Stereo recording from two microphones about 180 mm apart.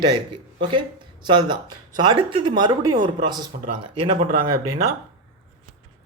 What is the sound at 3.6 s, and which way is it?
Speech, 45° right (ahead or behind).